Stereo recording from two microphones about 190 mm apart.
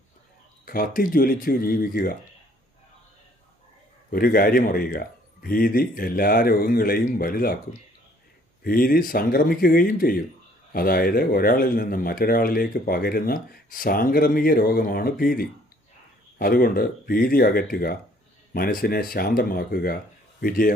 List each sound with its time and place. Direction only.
0.6 s a man's voice: 50° left (ahead or behind)
4.1 s a man's voice: 50° left (ahead or behind)
8.6 s a man's voice: 50° left (ahead or behind)